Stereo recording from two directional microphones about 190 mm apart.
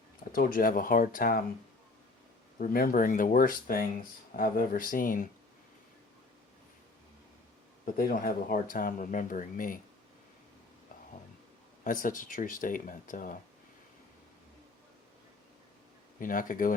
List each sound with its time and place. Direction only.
0.3 s speech: 50° left (ahead or behind)
2.6 s speech: 45° left (ahead or behind)
7.9 s speech: 50° left (ahead or behind)
11.8 s speech: 45° left (ahead or behind)
16.2 s speech: 45° left (ahead or behind)